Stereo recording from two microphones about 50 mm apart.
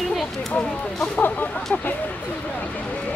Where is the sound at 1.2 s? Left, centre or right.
Left.